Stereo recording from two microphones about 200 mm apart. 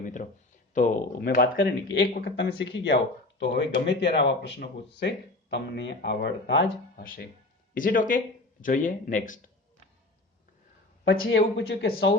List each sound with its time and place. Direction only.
0.0 s a sound: 40° left (ahead or behind)
0.7 s speech: 40° left (ahead or behind)
2.2 s speech: 60° left (ahead or behind)
6.9 s speech: 45° left (ahead or behind)
11.0 s speech: 50° left (ahead or behind)
11.3 s speech: 65° left (ahead or behind)